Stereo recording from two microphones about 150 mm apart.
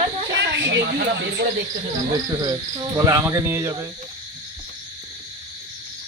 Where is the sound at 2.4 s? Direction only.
20° right (ahead or behind).